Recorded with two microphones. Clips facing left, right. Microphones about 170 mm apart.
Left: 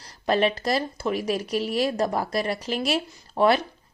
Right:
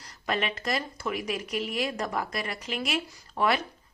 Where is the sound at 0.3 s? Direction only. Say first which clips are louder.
Left 7 dB; 35° left (ahead or behind).